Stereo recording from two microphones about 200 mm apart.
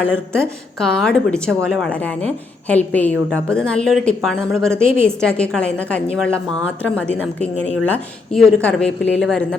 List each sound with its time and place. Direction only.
0.0 s speech: 5° left (ahead or behind)